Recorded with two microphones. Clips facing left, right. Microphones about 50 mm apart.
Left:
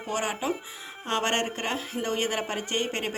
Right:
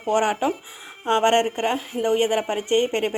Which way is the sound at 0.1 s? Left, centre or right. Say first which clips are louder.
Right 8 dB; right.